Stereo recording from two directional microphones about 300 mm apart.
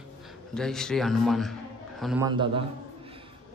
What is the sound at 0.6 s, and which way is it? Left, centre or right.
A man's voice, centre.